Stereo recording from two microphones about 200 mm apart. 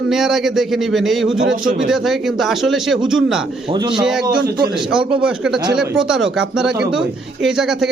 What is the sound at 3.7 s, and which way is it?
Speech, 25° right (ahead or behind).